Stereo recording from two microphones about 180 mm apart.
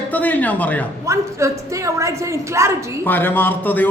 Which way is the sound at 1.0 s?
15° right (ahead or behind).